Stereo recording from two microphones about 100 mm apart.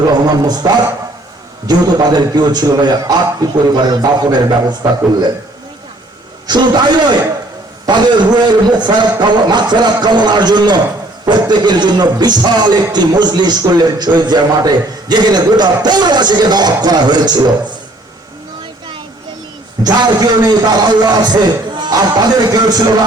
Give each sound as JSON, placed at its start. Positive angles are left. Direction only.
{"t": 0.0, "sound": "a man's voice", "side_deg": -40}
{"t": 1.6, "sound": "a man's voice", "side_deg": -40}
{"t": 6.5, "sound": "a man's voice", "side_deg": -45}
{"t": 19.8, "sound": "a man's voice", "side_deg": -45}